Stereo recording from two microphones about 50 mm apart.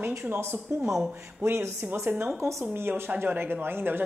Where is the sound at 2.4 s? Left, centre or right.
Right.